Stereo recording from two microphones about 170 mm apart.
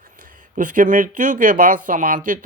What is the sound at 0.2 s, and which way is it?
Speech, 50° right (ahead or behind).